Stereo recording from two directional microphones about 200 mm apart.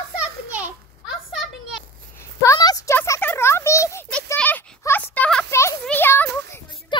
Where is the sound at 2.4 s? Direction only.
20° left (ahead or behind).